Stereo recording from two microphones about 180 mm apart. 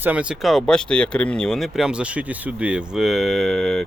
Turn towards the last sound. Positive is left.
turn(degrees=0)  # may be behind; listen again after turning